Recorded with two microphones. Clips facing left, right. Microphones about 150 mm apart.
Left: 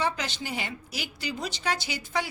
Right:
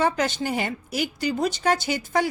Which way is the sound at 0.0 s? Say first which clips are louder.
Right 7 dB; 50° right (ahead or behind).